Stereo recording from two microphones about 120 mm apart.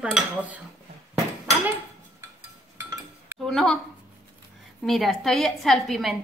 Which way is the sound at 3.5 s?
5° left (ahead or behind).